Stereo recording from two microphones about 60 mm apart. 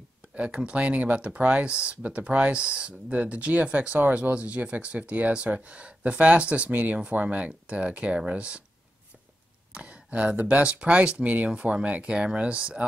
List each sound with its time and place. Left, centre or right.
0.4 s speech: centre
9.8 s speech: centre